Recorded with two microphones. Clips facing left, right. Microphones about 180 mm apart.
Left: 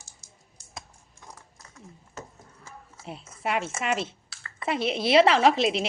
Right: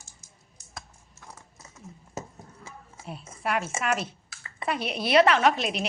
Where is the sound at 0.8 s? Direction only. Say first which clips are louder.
Even; 15° left (ahead or behind).